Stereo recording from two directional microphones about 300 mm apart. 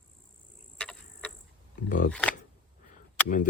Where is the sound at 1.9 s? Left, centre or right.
Left.